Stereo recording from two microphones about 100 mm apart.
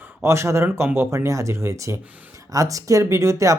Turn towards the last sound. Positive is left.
turn(degrees=-30)  # may be behind; listen again after turning